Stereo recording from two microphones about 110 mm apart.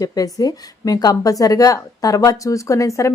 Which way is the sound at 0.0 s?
35° left (ahead or behind).